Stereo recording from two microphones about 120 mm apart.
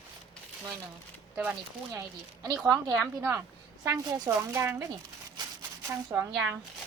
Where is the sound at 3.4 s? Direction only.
25° right (ahead or behind).